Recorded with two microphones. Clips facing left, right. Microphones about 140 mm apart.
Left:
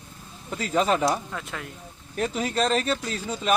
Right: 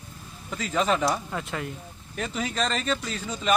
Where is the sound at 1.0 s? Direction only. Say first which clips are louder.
Left 1 dB; centre (ahead or behind).